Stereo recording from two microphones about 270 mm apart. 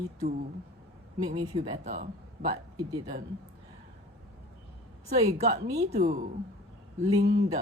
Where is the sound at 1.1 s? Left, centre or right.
Centre.